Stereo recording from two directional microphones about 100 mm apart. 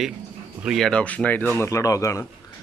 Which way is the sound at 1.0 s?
15° left (ahead or behind).